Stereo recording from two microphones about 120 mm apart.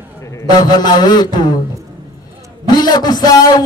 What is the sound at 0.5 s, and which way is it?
A man's voice, 35° left (ahead or behind).